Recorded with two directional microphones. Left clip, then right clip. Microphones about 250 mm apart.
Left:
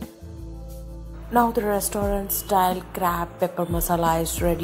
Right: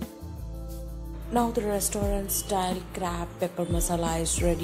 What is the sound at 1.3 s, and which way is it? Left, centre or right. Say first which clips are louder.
A woman's voice: left 6 dB; centre.